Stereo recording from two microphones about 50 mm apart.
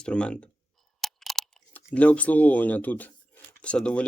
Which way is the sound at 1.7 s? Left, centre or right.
Left.